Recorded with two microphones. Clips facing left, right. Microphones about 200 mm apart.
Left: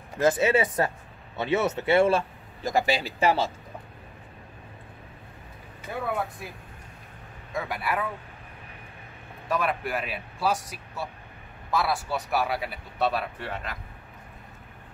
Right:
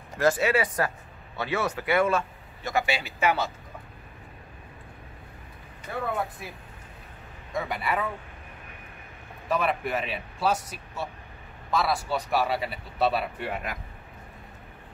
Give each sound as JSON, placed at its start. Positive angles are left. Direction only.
{"t": 0.2, "sound": "speech", "side_deg": 20}
{"t": 7.5, "sound": "speech", "side_deg": 0}
{"t": 9.5, "sound": "speech", "side_deg": 0}